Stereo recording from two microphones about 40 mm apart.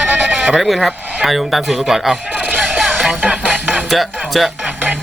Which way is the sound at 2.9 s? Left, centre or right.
Centre.